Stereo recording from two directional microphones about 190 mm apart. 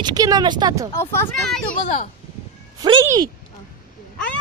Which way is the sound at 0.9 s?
15° left (ahead or behind).